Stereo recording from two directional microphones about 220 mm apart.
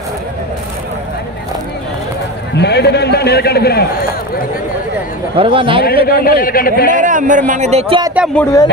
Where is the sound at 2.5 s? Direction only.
50° left (ahead or behind).